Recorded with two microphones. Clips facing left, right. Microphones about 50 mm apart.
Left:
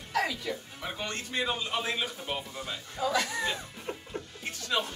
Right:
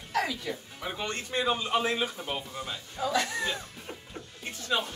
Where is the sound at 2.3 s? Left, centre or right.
Centre.